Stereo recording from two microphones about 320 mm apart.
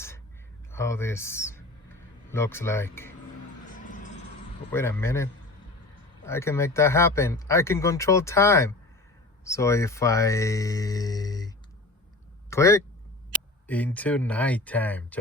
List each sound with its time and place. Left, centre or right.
0.7 s speech: centre
3.8 s music: left
4.7 s speech: centre